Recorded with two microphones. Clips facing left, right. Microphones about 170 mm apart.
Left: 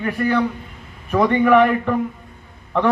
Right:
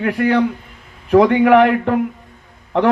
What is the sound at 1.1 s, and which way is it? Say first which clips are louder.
Speech: right 6 dB; 85° right.